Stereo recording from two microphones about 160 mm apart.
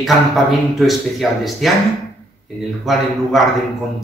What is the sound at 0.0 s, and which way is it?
Speech, centre (ahead or behind).